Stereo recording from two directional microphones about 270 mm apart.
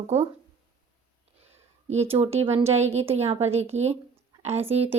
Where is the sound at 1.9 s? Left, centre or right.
Right.